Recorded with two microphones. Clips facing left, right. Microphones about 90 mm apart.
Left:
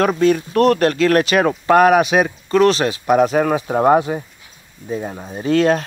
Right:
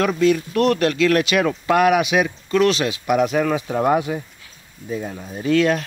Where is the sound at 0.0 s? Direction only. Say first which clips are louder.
Left 2 dB; 40° left (ahead or behind).